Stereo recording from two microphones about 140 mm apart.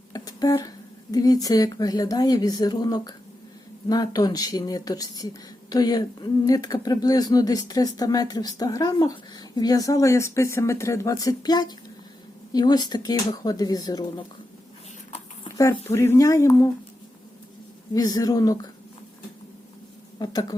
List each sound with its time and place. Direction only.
0.1 s a sound: 25° left (ahead or behind)
1.1 s speech: 25° left (ahead or behind)
15.4 s speech: 25° left (ahead or behind)
17.9 s speech: 25° left (ahead or behind)
20.1 s speech: 30° left (ahead or behind)